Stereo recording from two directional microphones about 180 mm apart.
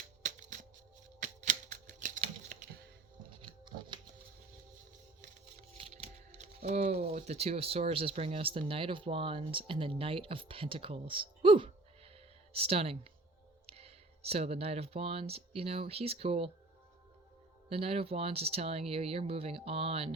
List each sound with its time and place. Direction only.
0.2 s music: 45° right (ahead or behind)
1.2 s typewriter: 45° right (ahead or behind)
3.4 s patter: 25° right (ahead or behind)
5.7 s speech: 35° right (ahead or behind)
17.7 s speech: 35° right (ahead or behind)